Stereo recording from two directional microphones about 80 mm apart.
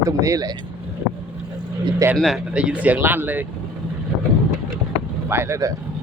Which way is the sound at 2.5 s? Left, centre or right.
Centre.